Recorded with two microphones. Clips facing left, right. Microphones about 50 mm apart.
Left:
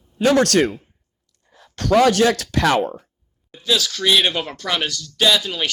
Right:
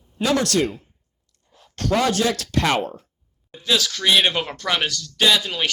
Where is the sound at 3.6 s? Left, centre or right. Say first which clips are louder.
Left 1 dB; right.